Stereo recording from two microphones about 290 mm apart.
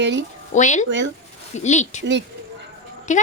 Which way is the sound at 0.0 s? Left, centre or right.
Right.